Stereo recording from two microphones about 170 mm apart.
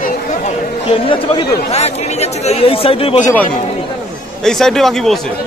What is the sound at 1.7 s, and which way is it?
Speech, 40° left (ahead or behind).